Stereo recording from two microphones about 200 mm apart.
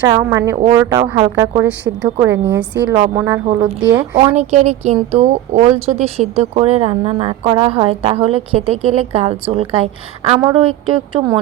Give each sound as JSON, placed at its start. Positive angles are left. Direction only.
{"t": 0.1, "sound": "speech", "side_deg": -15}
{"t": 1.6, "sound": "speech", "side_deg": -5}
{"t": 4.4, "sound": "speech", "side_deg": -35}